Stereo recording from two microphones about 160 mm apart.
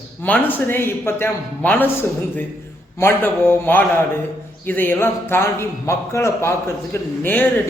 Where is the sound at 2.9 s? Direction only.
15° left (ahead or behind).